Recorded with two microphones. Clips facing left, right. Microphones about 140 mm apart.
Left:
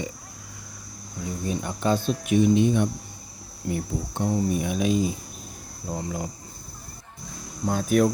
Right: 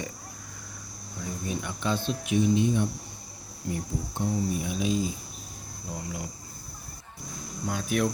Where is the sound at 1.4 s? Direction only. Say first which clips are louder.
Left 6 dB; 35° left (ahead or behind); by 5.1 s 60° left (ahead or behind).